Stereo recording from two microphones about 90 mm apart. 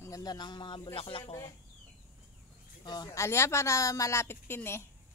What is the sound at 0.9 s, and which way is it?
Speech, 90° left.